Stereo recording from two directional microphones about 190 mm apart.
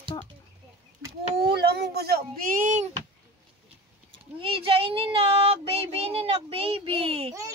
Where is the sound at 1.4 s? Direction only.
60° right (ahead or behind).